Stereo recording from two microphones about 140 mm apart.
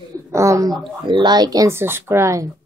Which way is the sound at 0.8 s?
35° right (ahead or behind).